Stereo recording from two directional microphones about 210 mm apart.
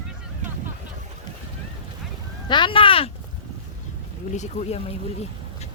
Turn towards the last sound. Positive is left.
turn(degrees=30)  # may be behind; listen again after turning